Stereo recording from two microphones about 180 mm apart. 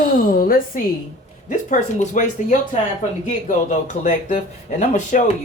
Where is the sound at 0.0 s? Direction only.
55° left (ahead or behind).